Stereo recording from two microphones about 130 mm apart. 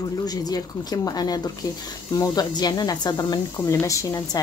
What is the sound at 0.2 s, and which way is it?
Speech, 30° left (ahead or behind).